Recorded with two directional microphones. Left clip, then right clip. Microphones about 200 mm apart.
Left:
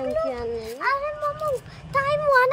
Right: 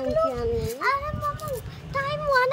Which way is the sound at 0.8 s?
40° left (ahead or behind).